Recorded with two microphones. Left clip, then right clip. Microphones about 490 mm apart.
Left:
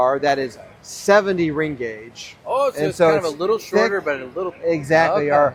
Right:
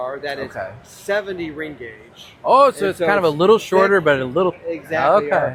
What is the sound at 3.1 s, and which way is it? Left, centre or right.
A man's voice, right.